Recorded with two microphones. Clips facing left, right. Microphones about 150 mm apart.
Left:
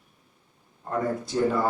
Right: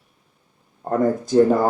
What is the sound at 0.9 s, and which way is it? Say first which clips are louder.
Speech: right 9 dB; 45° right (ahead or behind).